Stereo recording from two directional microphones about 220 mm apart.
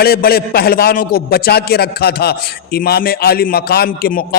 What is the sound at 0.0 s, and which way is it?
A man's voice, 45° left (ahead or behind).